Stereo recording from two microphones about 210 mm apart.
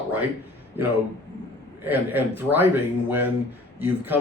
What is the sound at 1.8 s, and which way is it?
Speech, 10° right (ahead or behind).